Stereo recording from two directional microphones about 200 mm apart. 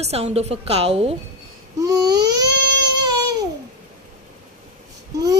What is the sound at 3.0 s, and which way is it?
Babbling, 20° right (ahead or behind).